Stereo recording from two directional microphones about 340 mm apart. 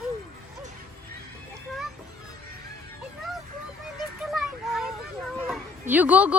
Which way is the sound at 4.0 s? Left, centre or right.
Centre.